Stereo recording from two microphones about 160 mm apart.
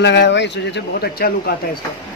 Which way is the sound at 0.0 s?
90° left.